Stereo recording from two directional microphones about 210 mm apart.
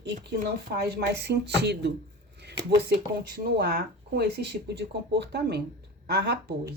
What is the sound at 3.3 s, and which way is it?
Speech, 45° right (ahead or behind).